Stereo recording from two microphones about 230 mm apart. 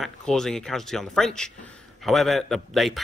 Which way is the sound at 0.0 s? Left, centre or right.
Centre.